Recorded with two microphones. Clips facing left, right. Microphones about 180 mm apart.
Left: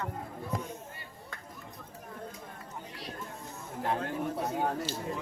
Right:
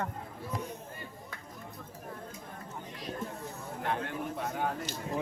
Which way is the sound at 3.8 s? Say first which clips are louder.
Left 3 dB; 35° left (ahead or behind).